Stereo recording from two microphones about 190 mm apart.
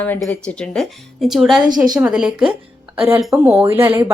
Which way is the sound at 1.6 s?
20° right (ahead or behind).